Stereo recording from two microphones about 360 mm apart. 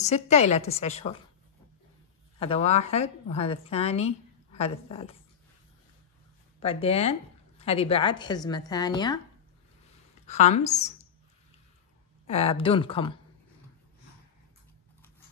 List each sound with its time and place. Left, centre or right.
0.0 s a woman's voice: centre
2.3 s a woman's voice: centre
6.6 s a woman's voice: centre
10.2 s speech: centre
12.3 s a woman's voice: centre